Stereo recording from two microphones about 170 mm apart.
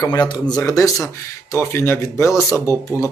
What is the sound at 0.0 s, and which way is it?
Speech, 25° left (ahead or behind).